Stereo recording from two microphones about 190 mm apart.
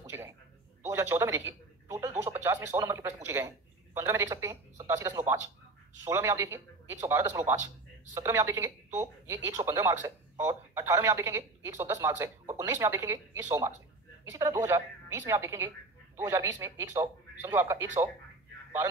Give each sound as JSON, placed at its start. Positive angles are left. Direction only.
{"t": 0.8, "sound": "speech", "side_deg": -15}